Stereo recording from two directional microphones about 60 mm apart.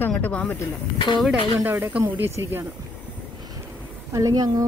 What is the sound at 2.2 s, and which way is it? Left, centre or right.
Speech, right.